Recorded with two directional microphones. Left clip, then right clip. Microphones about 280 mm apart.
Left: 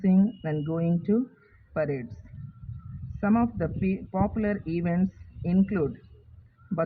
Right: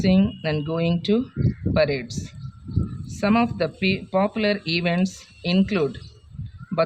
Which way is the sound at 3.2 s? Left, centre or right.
Right.